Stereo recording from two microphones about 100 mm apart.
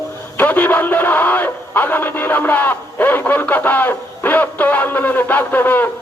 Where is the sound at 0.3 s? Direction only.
20° left (ahead or behind).